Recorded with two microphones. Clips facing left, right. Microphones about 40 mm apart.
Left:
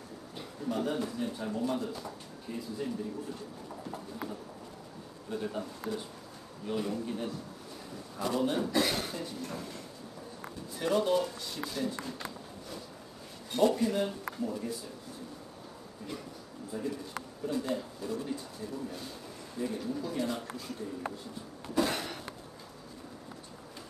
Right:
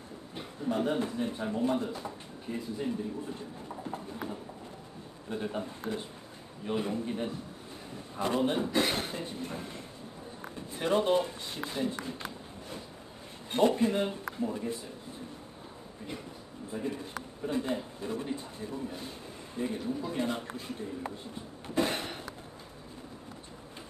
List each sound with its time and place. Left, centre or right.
0.4 s speech: right
5.4 s a man's voice: right
13.5 s a man's voice: right
16.7 s a man's voice: right
21.7 s a sound: right